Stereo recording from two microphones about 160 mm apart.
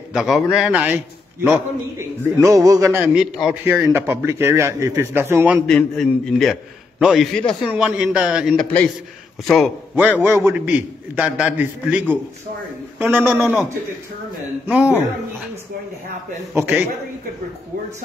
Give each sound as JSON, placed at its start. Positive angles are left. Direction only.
{"t": 0.1, "sound": "a man's voice", "side_deg": -5}
{"t": 3.2, "sound": "a man's voice", "side_deg": -5}
{"t": 3.9, "sound": "a man's voice", "side_deg": -15}
{"t": 5.7, "sound": "a man's voice", "side_deg": 5}
{"t": 9.9, "sound": "a man's voice", "side_deg": -10}
{"t": 14.7, "sound": "a man's voice", "side_deg": -5}
{"t": 16.5, "sound": "a man's voice", "side_deg": -10}